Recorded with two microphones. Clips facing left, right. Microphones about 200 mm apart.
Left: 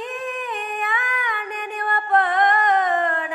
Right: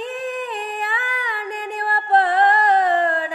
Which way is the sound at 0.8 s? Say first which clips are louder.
Even; 30° right (ahead or behind).